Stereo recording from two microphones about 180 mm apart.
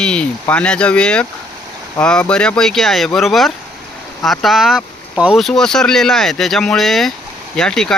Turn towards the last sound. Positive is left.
turn(degrees=5)  # may be behind; listen again after turning